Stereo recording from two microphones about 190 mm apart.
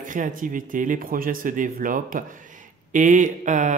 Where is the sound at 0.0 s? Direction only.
45° right (ahead or behind).